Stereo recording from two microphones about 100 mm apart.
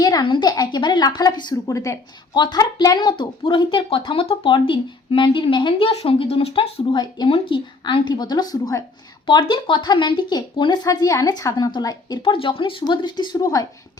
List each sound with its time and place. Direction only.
0.0 s speech: 45° left (ahead or behind)
5.9 s speech: 75° left (ahead or behind)
6.9 s speech: 45° left (ahead or behind)
9.2 s speech: 50° left (ahead or behind)
10.8 s a woman's voice: 35° left (ahead or behind)
12.2 s speech: 60° left (ahead or behind); by 13.7 s 35° left (ahead or behind)